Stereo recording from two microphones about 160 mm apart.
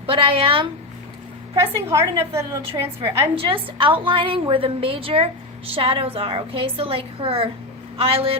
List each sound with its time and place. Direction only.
0.0 s a woman's voice: 35° right (ahead or behind)
1.5 s a woman's voice: 20° right (ahead or behind)
3.5 s a woman's voice: 30° right (ahead or behind)